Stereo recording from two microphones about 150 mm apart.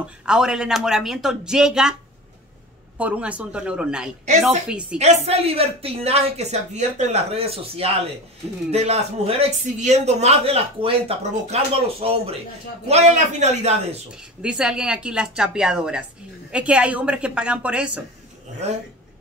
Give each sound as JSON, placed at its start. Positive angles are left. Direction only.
{"t": 0.0, "sound": "speech", "side_deg": -5}
{"t": 3.0, "sound": "a woman's voice", "side_deg": -10}
{"t": 4.9, "sound": "a man's voice", "side_deg": -45}
{"t": 14.4, "sound": "a woman's voice", "side_deg": -5}
{"t": 18.6, "sound": "a man's voice", "side_deg": -45}